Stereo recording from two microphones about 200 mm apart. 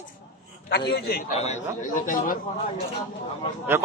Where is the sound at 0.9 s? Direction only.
50° left (ahead or behind).